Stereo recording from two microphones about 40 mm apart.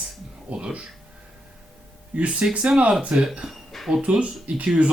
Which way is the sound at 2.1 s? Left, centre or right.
Right.